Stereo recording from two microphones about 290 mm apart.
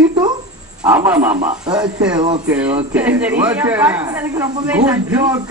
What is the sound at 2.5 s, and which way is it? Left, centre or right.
Speech, centre.